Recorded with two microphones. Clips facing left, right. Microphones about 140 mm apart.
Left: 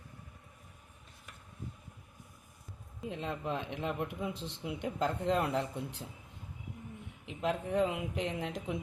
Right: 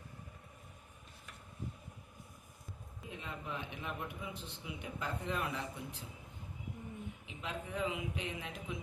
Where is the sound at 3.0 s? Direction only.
85° left.